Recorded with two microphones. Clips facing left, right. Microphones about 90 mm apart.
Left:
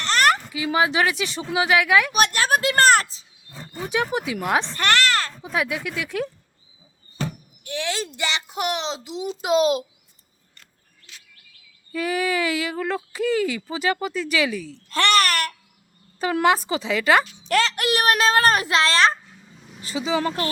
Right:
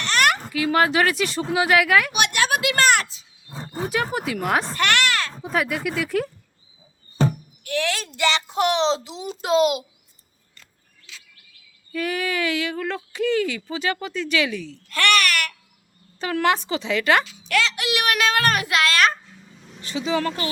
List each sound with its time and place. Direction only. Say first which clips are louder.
0.0 s a sound: left 1 dB; 35° left (ahead or behind)
0.5 s speech: right 2 dB; 10° left (ahead or behind)
2.1 s speech: left 2 dB; 40° left (ahead or behind)
3.5 s wild animals: right 4 dB; 35° right (ahead or behind)
3.9 s speech: left 2 dB; centre (ahead or behind)
4.8 s a sound: left 1 dB; 35° left (ahead or behind)
5.4 s speech: right 2 dB; centre (ahead or behind)
7.6 s speech: right 2 dB; 20° left (ahead or behind); by 9.3 s 5° left (ahead or behind)
9.4 s speech: right 1 dB; 15° left (ahead or behind)
11.9 s speech: left 2 dB; 10° left (ahead or behind)
14.8 s a child's voice: left 1 dB; 30° left (ahead or behind)
16.2 s speech: left 2 dB; 15° left (ahead or behind)
17.5 s a child's voice: left 2 dB; 40° left (ahead or behind)
19.9 s speech: even; 5° left (ahead or behind)